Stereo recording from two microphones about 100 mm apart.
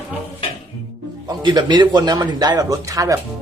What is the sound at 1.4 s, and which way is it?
A man's voice, 50° right (ahead or behind).